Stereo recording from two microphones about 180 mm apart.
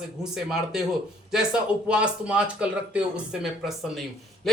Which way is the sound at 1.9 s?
5° right (ahead or behind).